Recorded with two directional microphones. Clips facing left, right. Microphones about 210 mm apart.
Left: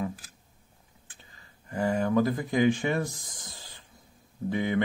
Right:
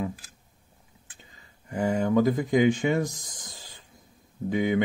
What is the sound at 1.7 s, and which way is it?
Speech, 20° right (ahead or behind).